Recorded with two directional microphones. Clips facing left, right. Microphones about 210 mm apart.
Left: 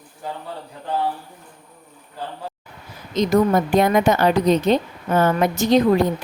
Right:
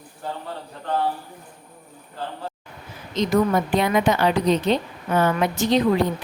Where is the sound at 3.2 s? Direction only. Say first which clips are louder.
Left 3 dB; 45° left (ahead or behind).